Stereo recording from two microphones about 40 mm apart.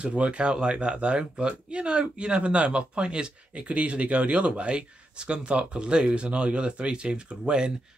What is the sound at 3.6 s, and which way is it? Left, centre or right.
Speech, right.